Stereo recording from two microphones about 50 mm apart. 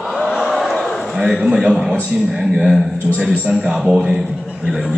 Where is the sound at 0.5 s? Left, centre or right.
Centre.